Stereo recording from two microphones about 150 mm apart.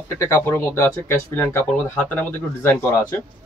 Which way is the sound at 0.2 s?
15° left (ahead or behind).